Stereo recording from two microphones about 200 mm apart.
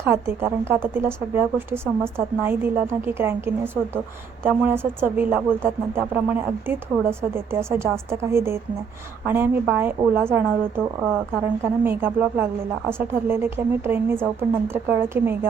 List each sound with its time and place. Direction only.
0.1 s speech: 10° right (ahead or behind)